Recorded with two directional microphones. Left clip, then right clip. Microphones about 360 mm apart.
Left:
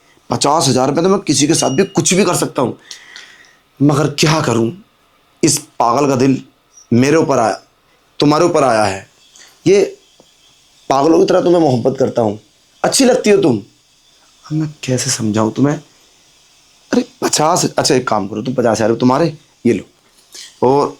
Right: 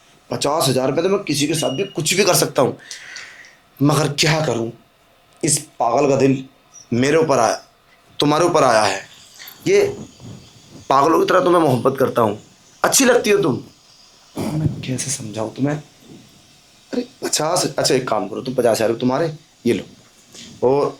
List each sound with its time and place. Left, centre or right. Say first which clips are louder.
0.3 s speech: left 5 dB; left
2.0 s speech: left 2 dB; centre
5.4 s speech: left 6 dB; left
10.8 s speech: left 3 dB; centre
14.8 s speech: left 8 dB; left
16.9 s speech: left 7 dB; left
20.6 s speech: left 4 dB; left